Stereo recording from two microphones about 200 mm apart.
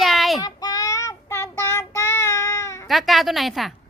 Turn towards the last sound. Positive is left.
turn(degrees=0)  # may be behind; listen again after turning